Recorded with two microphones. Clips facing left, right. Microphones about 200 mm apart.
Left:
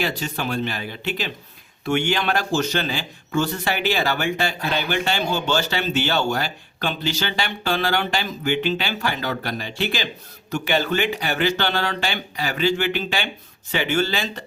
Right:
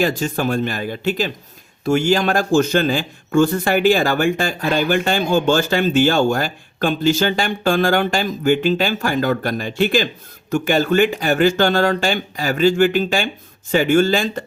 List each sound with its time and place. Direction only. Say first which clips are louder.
0.0 s a man's voice: right 7 dB; 45° right (ahead or behind)